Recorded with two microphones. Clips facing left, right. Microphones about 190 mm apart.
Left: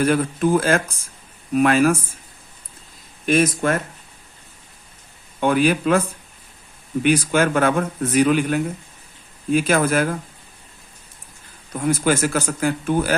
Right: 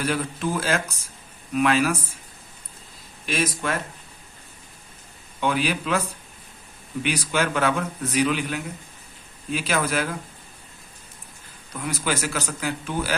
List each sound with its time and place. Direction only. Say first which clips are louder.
0.0 s speech: left 7 dB; 50° left (ahead or behind)
3.2 s speech: left 8 dB; 50° left (ahead or behind)
5.4 s speech: left 7 dB; 50° left (ahead or behind)
7.0 s speech: left 7 dB; 50° left (ahead or behind)
11.7 s speech: left 8 dB; 50° left (ahead or behind)